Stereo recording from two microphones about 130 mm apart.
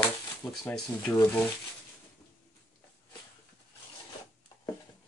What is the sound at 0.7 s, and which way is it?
Speech, 15° left (ahead or behind).